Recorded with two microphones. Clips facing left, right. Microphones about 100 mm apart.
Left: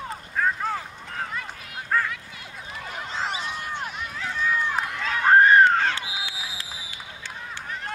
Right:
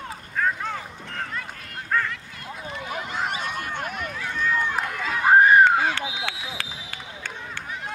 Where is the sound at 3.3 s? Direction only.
50° right (ahead or behind).